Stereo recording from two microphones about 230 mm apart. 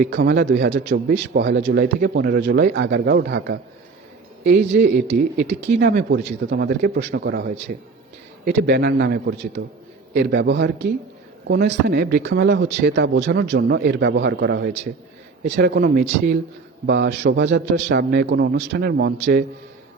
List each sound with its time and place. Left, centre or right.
0.0 s speech: right
4.8 s a man's voice: right